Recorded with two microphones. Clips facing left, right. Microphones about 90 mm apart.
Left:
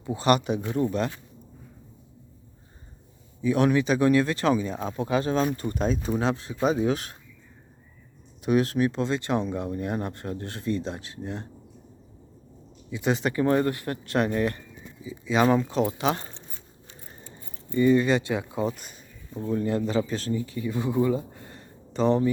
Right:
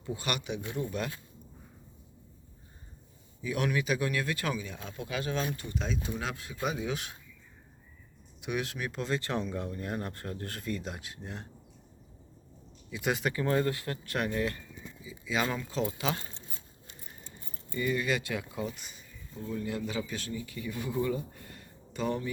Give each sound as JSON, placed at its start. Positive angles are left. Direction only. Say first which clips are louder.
{"t": 0.0, "sound": "speech", "louder": "left 12 dB", "side_deg": 30}
{"t": 3.4, "sound": "speech", "louder": "left 9 dB", "side_deg": 30}
{"t": 8.4, "sound": "speech", "louder": "left 12 dB", "side_deg": 40}
{"t": 12.9, "sound": "speech", "louder": "left 5 dB", "side_deg": 25}
{"t": 17.7, "sound": "speech", "louder": "left 10 dB", "side_deg": 30}
{"t": 18.7, "sound": "speech", "louder": "left 6 dB", "side_deg": 45}